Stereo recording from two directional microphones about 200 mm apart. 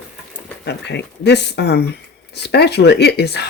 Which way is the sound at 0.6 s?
60° left (ahead or behind).